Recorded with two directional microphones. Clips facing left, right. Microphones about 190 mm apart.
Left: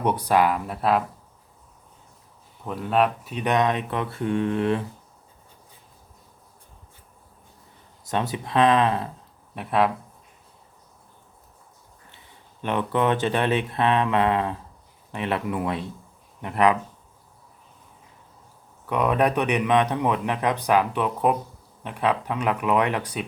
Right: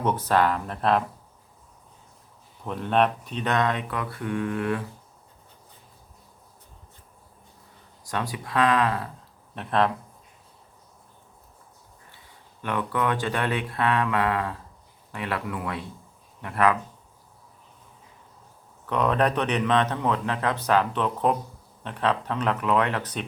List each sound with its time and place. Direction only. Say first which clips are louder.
0.0 s a man's voice: left 2 dB; 15° left (ahead or behind)
2.6 s speech: left 1 dB; 5° left (ahead or behind); by 4.8 s 25° left (ahead or behind)
8.0 s speech: left 4 dB; 20° left (ahead or behind)
9.6 s a man's voice: left 1 dB; 10° left (ahead or behind)
12.6 s speech: left 4 dB; 25° left (ahead or behind)
18.9 s a man's voice: left 1 dB; 10° left (ahead or behind)